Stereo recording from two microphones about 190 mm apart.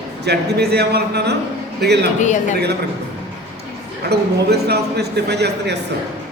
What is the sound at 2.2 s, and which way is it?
Speech, 40° left (ahead or behind).